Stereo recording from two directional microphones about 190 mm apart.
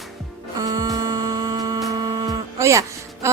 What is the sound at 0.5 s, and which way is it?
Music, 20° right (ahead or behind).